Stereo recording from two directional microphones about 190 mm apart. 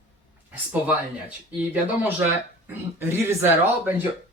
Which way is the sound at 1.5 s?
10° right (ahead or behind).